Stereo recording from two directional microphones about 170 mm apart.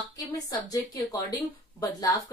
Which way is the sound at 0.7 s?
20° left (ahead or behind).